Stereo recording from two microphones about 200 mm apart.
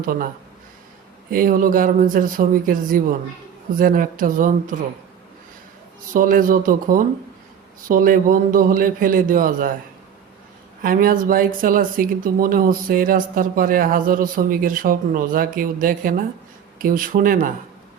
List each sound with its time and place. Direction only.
0.0 s speech: 45° right (ahead or behind)
1.3 s speech: 45° right (ahead or behind)
6.1 s speech: 40° right (ahead or behind)
10.8 s speech: 45° right (ahead or behind)